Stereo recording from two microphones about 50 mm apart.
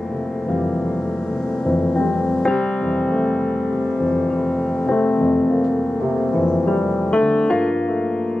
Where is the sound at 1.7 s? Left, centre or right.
Left.